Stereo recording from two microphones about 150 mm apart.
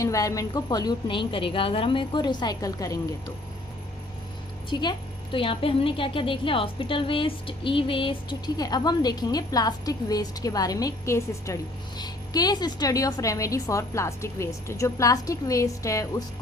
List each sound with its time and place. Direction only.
0.0 s a woman's voice: 20° left (ahead or behind)
4.7 s a woman's voice: 30° left (ahead or behind)